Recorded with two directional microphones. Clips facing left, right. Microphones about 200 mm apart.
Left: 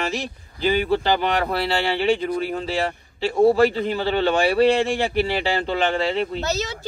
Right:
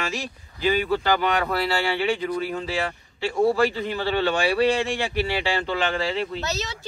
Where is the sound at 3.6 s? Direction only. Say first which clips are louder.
Left 4 dB; 50° left (ahead or behind).